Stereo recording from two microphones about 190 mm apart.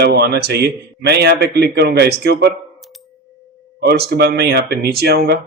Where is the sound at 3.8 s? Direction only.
60° right (ahead or behind).